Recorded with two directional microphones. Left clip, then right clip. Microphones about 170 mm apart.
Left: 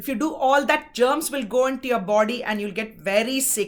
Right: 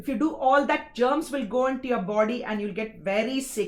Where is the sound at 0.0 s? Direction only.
20° left (ahead or behind).